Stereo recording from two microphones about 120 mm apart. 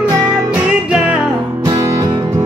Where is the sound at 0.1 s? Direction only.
30° right (ahead or behind).